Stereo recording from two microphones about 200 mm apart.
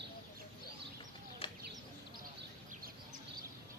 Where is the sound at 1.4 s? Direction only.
25° left (ahead or behind).